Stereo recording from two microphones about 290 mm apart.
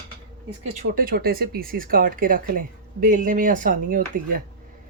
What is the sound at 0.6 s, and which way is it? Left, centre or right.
Speech, right.